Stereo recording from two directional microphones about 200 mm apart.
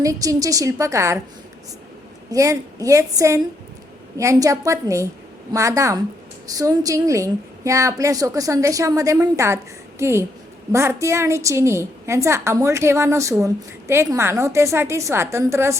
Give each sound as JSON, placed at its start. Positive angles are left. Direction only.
{"t": 0.0, "sound": "a woman's voice", "side_deg": -15}
{"t": 2.3, "sound": "a woman's voice", "side_deg": -15}